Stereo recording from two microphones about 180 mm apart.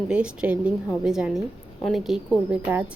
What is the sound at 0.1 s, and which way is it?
A woman's voice, 5° right (ahead or behind).